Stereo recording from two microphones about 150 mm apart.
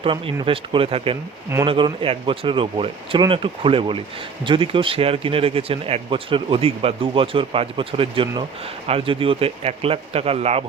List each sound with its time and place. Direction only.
0.0 s speech: 35° right (ahead or behind)